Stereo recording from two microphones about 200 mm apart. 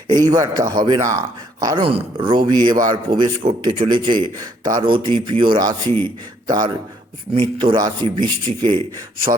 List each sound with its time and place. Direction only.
0.1 s speech: 20° right (ahead or behind)
5.8 s a man's voice: 10° left (ahead or behind)
6.5 s speech: 20° right (ahead or behind)